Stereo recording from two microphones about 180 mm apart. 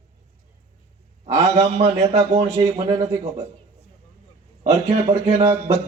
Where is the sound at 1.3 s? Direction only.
35° right (ahead or behind).